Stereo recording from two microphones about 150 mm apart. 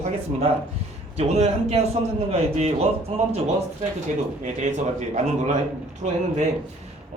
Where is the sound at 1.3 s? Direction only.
45° right (ahead or behind).